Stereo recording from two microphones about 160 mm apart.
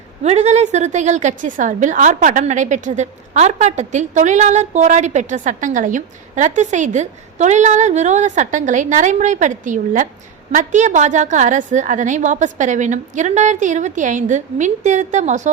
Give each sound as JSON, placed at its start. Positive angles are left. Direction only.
{"t": 0.2, "sound": "a woman's voice", "side_deg": -45}